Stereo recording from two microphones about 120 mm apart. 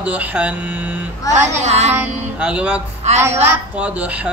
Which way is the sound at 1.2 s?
30° left (ahead or behind).